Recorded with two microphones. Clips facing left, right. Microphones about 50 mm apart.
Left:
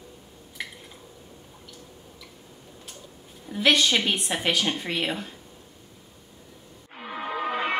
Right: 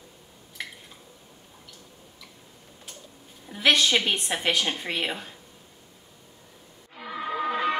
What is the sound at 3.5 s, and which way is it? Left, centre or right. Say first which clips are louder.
A woman's voice: even; centre.